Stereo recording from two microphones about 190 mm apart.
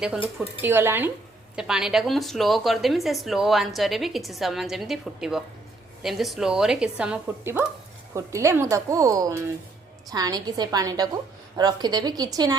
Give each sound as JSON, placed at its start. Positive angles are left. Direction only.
{"t": 0.6, "sound": "a woman's voice", "side_deg": -10}